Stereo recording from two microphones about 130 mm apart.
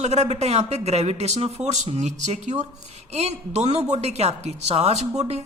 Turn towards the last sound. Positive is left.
turn(degrees=-55)  # may be behind; listen again after turning